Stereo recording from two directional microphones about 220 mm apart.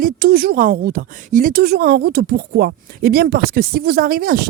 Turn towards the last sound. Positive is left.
turn(degrees=-40)  # may be behind; listen again after turning